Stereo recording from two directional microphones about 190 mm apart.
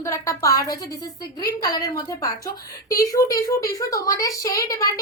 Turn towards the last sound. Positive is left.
turn(degrees=15)  # may be behind; listen again after turning